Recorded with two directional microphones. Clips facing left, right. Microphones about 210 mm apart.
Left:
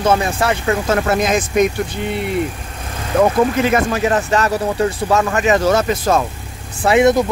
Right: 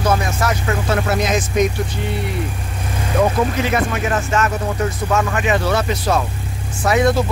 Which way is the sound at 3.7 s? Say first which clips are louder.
Left 4 dB; 35° left (ahead or behind).